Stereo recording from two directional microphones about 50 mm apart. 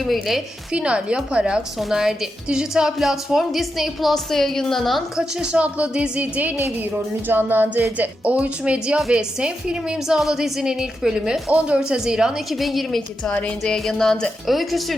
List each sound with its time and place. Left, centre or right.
0.0 s a woman's voice: centre
0.7 s a woman's voice: right; by 5.2 s centre
5.4 s speech: right
6.6 s music: right
9.1 s a woman's voice: centre
10.2 s a woman's voice: centre
12.5 s a woman's voice: centre
13.7 s music: centre
14.4 s a woman's voice: centre